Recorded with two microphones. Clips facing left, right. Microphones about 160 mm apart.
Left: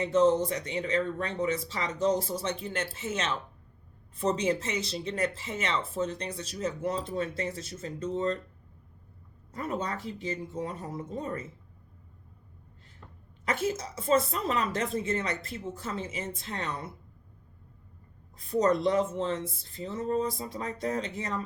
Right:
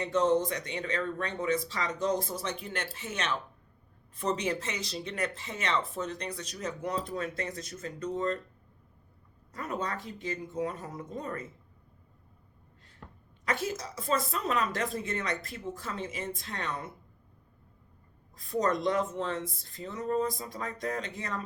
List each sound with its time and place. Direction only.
0.0 s speech: 30° left (ahead or behind)
9.5 s speech: 30° left (ahead or behind)
13.6 s speech: 30° left (ahead or behind)
18.3 s speech: 30° left (ahead or behind)